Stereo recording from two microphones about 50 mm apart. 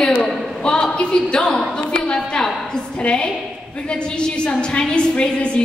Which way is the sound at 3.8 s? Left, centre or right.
Centre.